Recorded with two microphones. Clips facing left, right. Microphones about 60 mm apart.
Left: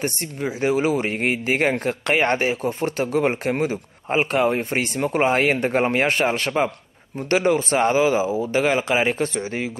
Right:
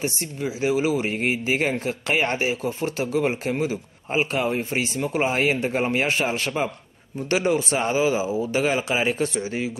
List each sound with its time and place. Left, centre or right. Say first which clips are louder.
0.0 s speech: left 2 dB; left